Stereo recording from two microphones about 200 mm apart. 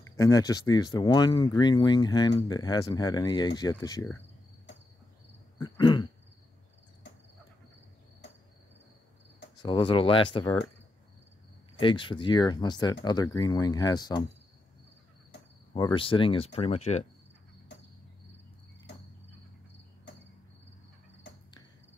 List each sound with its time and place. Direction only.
0.2 s speech: 20° left (ahead or behind)
5.6 s throat clearing: 20° left (ahead or behind)
9.6 s speech: 25° left (ahead or behind)
11.8 s speech: 25° left (ahead or behind)
15.7 s speech: 25° left (ahead or behind)